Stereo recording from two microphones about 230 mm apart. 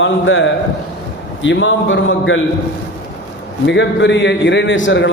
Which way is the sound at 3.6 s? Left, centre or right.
Left.